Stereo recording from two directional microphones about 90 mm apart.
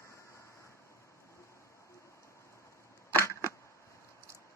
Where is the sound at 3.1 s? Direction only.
35° left (ahead or behind).